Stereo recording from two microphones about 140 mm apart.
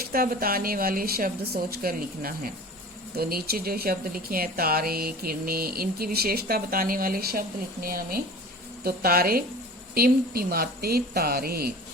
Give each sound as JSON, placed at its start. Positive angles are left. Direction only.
{"t": 0.1, "sound": "speech", "side_deg": -90}